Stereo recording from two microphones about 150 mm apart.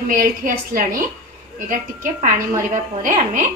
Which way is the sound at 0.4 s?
60° right (ahead or behind).